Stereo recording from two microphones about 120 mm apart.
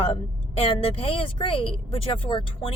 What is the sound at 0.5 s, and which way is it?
Speech, 50° left (ahead or behind).